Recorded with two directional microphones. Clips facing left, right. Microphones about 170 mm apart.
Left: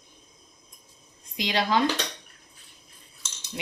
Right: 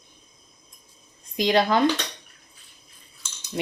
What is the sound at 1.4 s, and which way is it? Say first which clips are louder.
Speech: right 5 dB; 50° right (ahead or behind).